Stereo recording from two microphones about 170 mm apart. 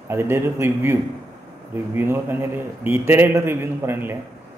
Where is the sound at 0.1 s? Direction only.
15° right (ahead or behind).